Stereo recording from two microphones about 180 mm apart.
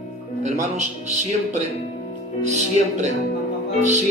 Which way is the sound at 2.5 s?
40° right (ahead or behind).